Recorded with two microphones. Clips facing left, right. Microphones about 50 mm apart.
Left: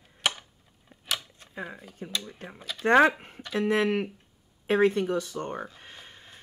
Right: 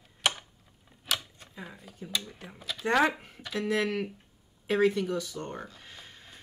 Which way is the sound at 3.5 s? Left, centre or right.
Left.